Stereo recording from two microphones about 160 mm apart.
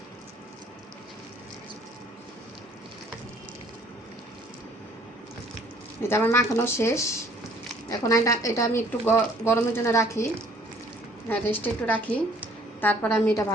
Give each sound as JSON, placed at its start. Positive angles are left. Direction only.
{"t": 6.0, "sound": "a woman's voice", "side_deg": 15}
{"t": 11.3, "sound": "a woman's voice", "side_deg": 10}